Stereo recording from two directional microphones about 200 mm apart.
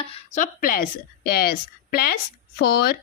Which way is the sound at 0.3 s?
40° left (ahead or behind).